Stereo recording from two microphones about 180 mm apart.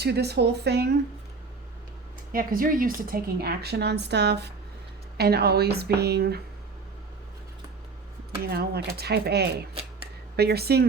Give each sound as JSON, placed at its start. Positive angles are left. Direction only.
{"t": 0.0, "sound": "a woman's voice", "side_deg": -65}
{"t": 2.3, "sound": "a woman's voice", "side_deg": -50}
{"t": 8.4, "sound": "a woman's voice", "side_deg": -60}